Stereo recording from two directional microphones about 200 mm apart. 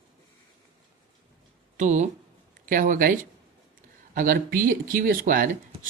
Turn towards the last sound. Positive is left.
turn(degrees=-45)  # may be behind; listen again after turning